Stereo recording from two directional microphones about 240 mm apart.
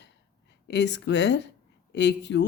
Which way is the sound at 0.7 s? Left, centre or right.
Left.